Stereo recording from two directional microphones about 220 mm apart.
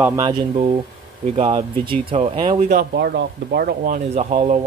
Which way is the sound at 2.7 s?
45° right (ahead or behind).